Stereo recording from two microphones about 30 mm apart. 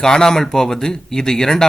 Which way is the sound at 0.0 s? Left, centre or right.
Left.